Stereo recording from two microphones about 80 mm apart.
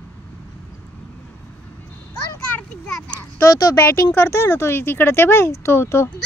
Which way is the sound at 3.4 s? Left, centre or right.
Left.